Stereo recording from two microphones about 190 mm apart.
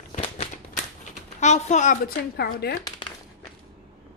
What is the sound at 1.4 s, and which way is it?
Speech, 35° left (ahead or behind).